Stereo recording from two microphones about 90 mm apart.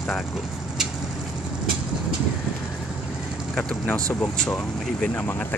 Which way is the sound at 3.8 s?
15° left (ahead or behind).